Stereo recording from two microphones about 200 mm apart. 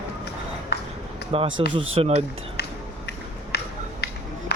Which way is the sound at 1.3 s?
30° right (ahead or behind).